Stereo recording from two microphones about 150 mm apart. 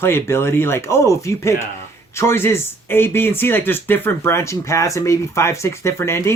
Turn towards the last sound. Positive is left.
turn(degrees=15)  # may be behind; listen again after turning